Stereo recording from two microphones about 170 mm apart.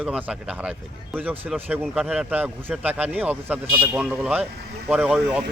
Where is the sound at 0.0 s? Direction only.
5° right (ahead or behind).